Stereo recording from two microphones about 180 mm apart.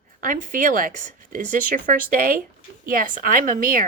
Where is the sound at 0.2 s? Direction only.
50° right (ahead or behind).